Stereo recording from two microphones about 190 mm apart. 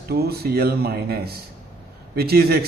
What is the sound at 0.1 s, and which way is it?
A man's voice, 55° right (ahead or behind).